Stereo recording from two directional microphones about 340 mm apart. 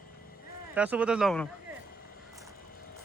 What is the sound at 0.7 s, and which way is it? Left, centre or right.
Speech, centre.